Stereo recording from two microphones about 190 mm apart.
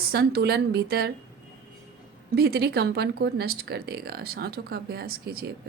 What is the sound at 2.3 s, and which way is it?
Speech, 55° right (ahead or behind).